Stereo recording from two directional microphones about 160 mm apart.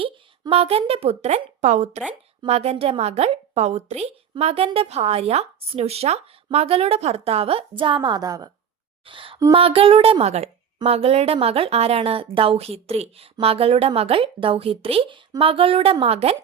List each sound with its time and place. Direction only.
0.0 s a woman's voice: 35° right (ahead or behind)
9.0 s a sound: 35° right (ahead or behind)
9.6 s a woman's voice: 35° right (ahead or behind)